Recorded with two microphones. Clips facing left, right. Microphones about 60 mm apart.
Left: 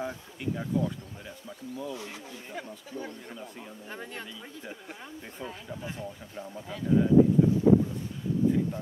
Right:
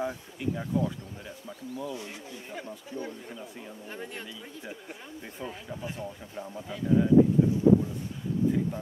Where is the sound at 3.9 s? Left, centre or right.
Left.